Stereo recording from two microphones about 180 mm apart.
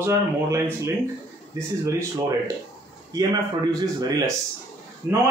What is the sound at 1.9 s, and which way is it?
A man's voice, 20° right (ahead or behind).